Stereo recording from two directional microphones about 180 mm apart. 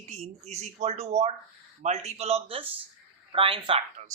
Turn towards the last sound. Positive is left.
turn(degrees=-30)  # may be behind; listen again after turning